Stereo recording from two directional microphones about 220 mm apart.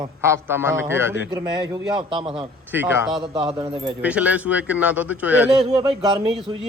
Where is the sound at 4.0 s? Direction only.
5° right (ahead or behind).